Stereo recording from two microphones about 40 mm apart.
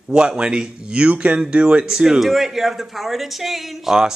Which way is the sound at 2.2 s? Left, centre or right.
Centre.